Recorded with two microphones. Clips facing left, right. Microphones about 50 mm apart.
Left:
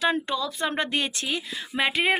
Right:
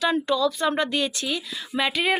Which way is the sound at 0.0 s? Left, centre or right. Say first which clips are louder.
Right 3 dB; left.